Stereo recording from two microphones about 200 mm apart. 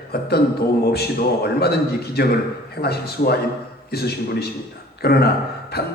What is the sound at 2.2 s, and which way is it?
A man's voice, 50° left (ahead or behind).